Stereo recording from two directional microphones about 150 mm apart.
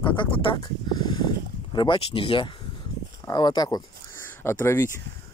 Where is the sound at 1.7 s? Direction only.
35° left (ahead or behind).